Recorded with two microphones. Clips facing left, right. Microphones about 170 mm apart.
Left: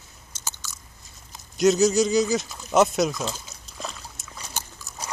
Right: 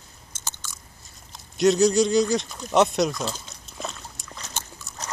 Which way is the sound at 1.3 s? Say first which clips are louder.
Even; centre (ahead or behind).